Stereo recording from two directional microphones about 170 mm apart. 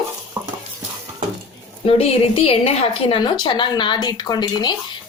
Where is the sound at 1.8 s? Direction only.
35° left (ahead or behind).